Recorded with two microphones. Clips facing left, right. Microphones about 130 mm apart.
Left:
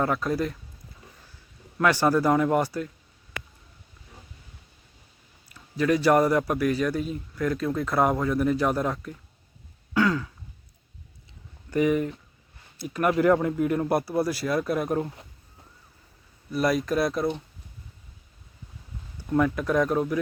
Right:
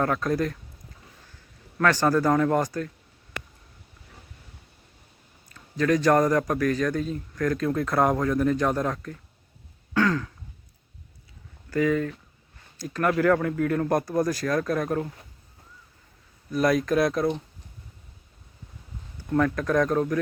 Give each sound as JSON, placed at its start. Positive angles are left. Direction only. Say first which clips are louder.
{"t": 0.0, "sound": "speech", "louder": "right 1 dB", "side_deg": 5}
{"t": 1.8, "sound": "speech", "louder": "even", "side_deg": 10}
{"t": 5.5, "sound": "a man's voice", "louder": "even", "side_deg": 10}
{"t": 9.9, "sound": "throat clearing", "louder": "even", "side_deg": 10}
{"t": 11.7, "sound": "speech", "louder": "left 1 dB", "side_deg": 20}
{"t": 16.5, "sound": "speech", "louder": "right 2 dB", "side_deg": 0}
{"t": 19.3, "sound": "speech", "louder": "even", "side_deg": 15}